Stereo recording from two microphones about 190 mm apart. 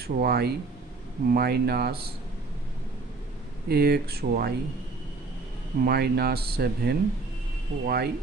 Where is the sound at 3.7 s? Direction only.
55° right (ahead or behind).